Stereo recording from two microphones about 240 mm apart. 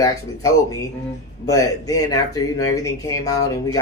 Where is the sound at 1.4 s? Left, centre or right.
Centre.